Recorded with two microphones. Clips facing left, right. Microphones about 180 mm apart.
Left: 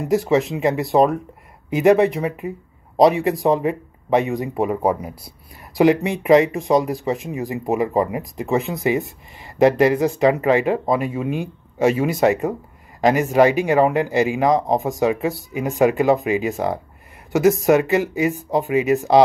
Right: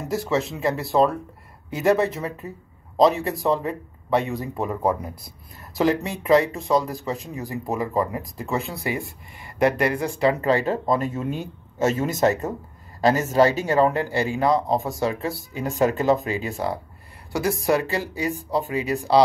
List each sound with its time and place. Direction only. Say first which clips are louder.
0.1 s speech: left 6 dB; 15° left (ahead or behind)